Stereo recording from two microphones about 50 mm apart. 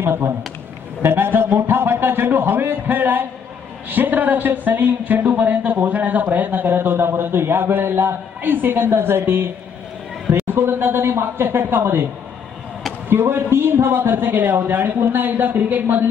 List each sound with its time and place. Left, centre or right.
0.0 s speech: right
13.1 s speech: right